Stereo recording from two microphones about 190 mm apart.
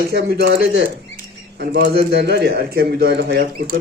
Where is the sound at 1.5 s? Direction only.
55° right (ahead or behind).